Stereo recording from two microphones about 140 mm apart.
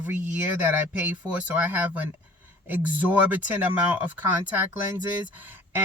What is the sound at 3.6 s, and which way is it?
Speech, 10° right (ahead or behind).